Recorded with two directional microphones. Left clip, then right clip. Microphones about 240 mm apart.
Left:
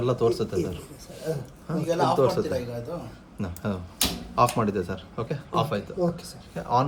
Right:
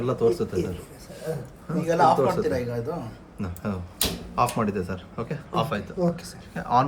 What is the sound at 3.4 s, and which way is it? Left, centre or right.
Speech, left.